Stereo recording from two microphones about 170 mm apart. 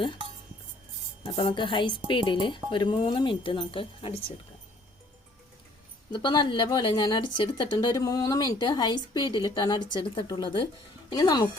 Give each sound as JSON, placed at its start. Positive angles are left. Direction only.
{"t": 1.2, "sound": "a woman's voice", "side_deg": 30}
{"t": 6.1, "sound": "a woman's voice", "side_deg": 25}